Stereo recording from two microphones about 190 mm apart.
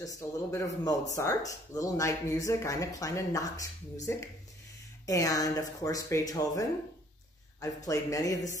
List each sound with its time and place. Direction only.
0.0 s speech: 15° left (ahead or behind)
7.6 s speech: 15° left (ahead or behind)